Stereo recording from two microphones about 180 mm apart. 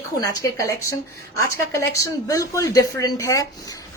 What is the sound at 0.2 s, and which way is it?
A woman's voice, 15° left (ahead or behind).